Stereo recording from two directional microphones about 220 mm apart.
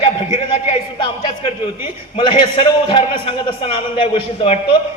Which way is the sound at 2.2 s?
20° left (ahead or behind).